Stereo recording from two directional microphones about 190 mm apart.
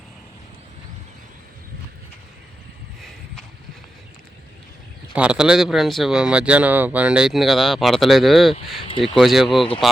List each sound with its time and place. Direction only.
5.1 s speech: 5° right (ahead or behind)